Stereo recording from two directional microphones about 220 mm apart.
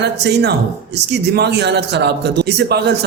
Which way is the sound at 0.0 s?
50° right (ahead or behind).